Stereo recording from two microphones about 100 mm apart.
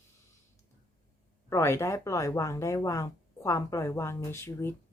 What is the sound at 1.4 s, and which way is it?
Speech, 30° left (ahead or behind).